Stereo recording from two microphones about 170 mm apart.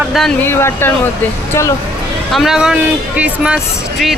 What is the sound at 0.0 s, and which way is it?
Speech, centre (ahead or behind).